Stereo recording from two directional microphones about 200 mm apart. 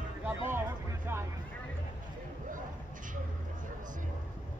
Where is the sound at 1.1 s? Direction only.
10° right (ahead or behind).